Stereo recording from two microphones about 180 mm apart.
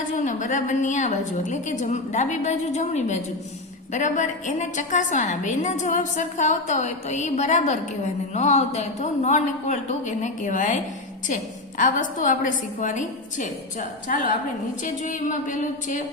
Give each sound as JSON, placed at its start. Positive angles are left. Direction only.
{"t": 0.2, "sound": "a woman's voice", "side_deg": 45}
{"t": 11.8, "sound": "a woman's voice", "side_deg": 45}